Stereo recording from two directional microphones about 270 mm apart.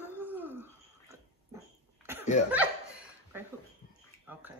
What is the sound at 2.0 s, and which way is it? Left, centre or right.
Cough, centre.